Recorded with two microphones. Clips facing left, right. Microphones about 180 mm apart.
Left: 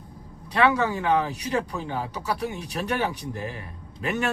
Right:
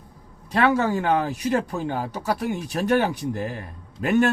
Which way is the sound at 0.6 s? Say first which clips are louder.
Right 1 dB; 50° right (ahead or behind).